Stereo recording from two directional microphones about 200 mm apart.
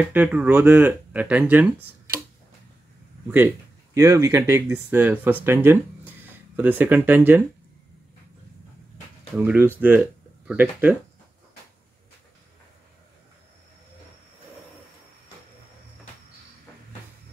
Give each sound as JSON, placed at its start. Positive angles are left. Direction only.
{"t": 0.1, "sound": "speech", "side_deg": -5}
{"t": 3.3, "sound": "speech", "side_deg": -10}
{"t": 9.4, "sound": "speech", "side_deg": -10}